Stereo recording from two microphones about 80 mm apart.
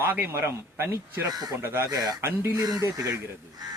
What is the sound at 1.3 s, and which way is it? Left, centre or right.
Speech, right.